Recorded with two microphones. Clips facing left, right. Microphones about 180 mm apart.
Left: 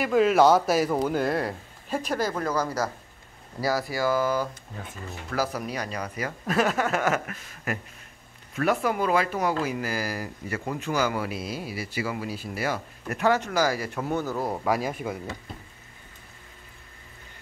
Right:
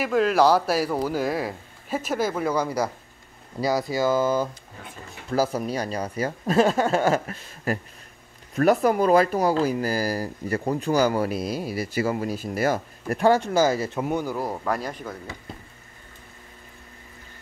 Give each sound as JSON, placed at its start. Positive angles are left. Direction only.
{"t": 0.0, "sound": "speech", "side_deg": 0}
{"t": 14.4, "sound": "speech", "side_deg": 5}